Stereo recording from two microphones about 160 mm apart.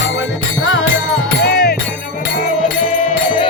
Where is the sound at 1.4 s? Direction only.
75° left (ahead or behind).